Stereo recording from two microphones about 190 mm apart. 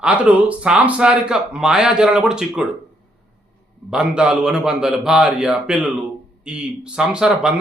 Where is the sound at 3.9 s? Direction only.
5° right (ahead or behind).